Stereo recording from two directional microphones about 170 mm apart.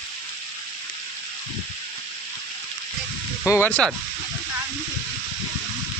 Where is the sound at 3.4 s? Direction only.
15° left (ahead or behind).